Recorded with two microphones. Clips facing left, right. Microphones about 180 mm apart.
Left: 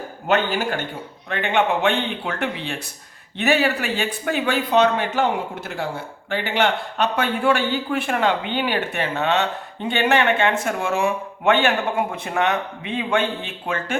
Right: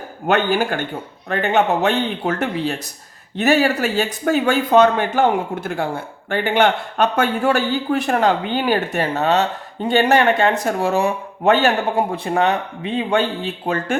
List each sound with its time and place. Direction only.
1.3 s a man's voice: 40° right (ahead or behind)